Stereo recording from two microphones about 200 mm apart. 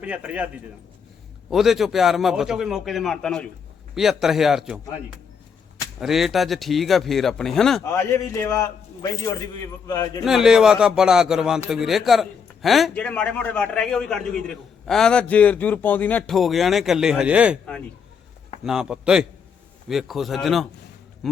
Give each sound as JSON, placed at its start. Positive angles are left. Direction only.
{"t": 0.0, "sound": "a man's voice", "side_deg": -5}
{"t": 6.0, "sound": "speech", "side_deg": 0}
{"t": 7.9, "sound": "a man's voice", "side_deg": 15}
{"t": 10.2, "sound": "speech", "side_deg": 0}
{"t": 18.6, "sound": "speech", "side_deg": -5}